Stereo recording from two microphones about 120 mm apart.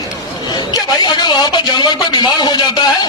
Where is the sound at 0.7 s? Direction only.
35° left (ahead or behind).